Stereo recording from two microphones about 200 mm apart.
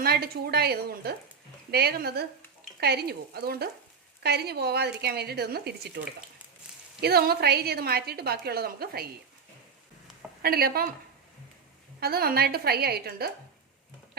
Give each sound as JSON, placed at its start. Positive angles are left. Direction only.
{"t": 0.0, "sound": "a woman's voice", "side_deg": -50}
{"t": 7.0, "sound": "a woman's voice", "side_deg": -50}
{"t": 10.4, "sound": "a woman's voice", "side_deg": -50}
{"t": 11.9, "sound": "a woman's voice", "side_deg": -50}